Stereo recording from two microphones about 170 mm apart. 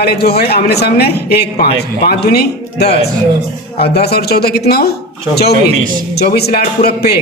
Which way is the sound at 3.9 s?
70° left (ahead or behind).